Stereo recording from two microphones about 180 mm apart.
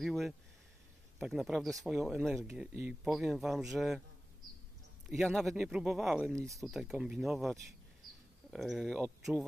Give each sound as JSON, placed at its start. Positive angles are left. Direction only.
{"t": 0.0, "sound": "speech", "side_deg": 0}
{"t": 5.1, "sound": "speech", "side_deg": 0}